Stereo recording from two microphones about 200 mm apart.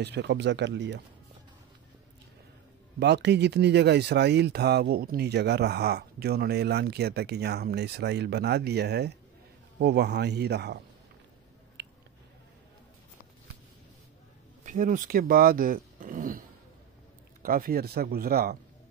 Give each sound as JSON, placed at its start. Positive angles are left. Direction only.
{"t": 0.0, "sound": "speech", "side_deg": -55}
{"t": 3.0, "sound": "speech", "side_deg": -55}
{"t": 11.8, "sound": "squish", "side_deg": -55}
{"t": 14.6, "sound": "speech", "side_deg": -40}